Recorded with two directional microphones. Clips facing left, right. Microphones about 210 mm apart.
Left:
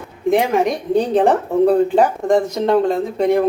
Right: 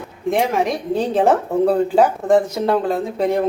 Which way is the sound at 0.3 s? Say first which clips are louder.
Left 3 dB; centre (ahead or behind).